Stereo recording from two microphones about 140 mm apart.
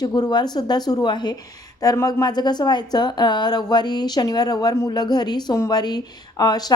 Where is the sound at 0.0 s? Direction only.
30° left (ahead or behind).